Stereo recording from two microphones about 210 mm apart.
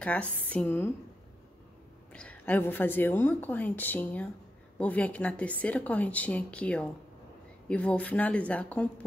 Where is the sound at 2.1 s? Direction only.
5° left (ahead or behind).